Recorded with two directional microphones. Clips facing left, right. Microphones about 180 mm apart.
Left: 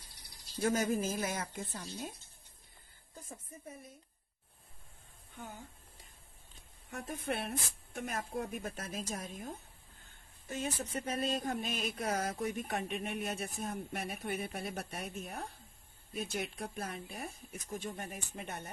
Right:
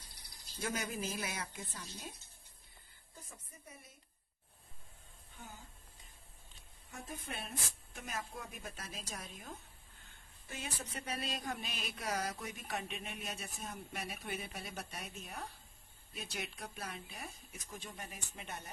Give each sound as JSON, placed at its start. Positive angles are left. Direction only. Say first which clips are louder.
{"t": 0.6, "sound": "speech", "louder": "left 8 dB", "side_deg": 45}
{"t": 6.9, "sound": "speech", "louder": "left 8 dB", "side_deg": 65}